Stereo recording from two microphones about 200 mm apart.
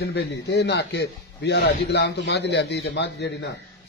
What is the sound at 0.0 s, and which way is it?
A man's voice, 55° left (ahead or behind).